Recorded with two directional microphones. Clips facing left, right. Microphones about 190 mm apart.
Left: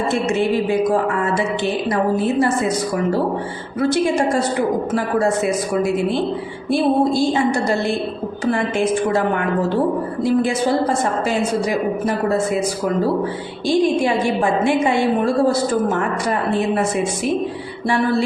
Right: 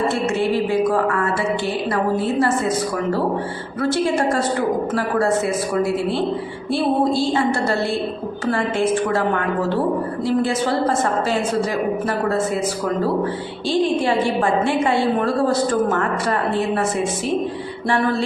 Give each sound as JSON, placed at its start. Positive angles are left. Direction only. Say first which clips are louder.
{"t": 0.1, "sound": "a woman's voice", "louder": "left 1 dB", "side_deg": 15}
{"t": 3.8, "sound": "a woman's voice", "louder": "left 2 dB", "side_deg": 15}
{"t": 6.7, "sound": "a woman's voice", "louder": "left 2 dB", "side_deg": 15}
{"t": 10.2, "sound": "a woman's voice", "louder": "left 3 dB", "side_deg": 15}
{"t": 13.7, "sound": "a woman's voice", "louder": "left 2 dB", "side_deg": 15}